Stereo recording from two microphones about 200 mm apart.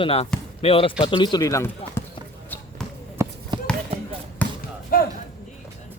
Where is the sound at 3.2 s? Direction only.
15° right (ahead or behind).